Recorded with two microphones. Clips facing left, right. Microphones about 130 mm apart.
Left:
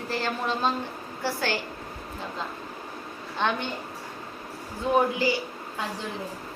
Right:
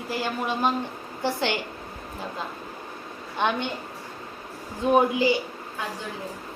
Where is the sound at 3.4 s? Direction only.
15° right (ahead or behind).